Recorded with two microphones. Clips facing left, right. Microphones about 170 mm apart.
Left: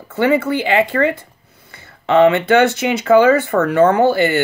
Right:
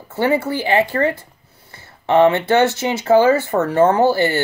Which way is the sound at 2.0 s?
65° left (ahead or behind).